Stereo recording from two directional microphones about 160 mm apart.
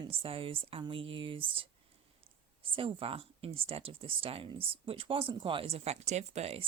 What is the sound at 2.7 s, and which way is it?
Speech, 35° right (ahead or behind).